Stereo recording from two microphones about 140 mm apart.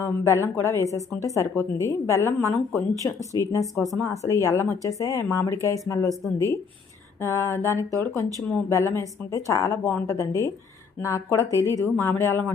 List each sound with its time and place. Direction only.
0.0 s speech: 20° left (ahead or behind)
7.2 s speech: 20° left (ahead or behind)